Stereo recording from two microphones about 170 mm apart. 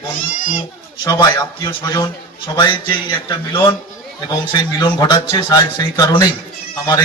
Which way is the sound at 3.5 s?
30° left (ahead or behind).